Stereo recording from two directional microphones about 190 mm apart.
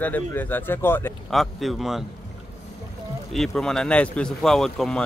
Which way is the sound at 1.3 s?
Centre (ahead or behind).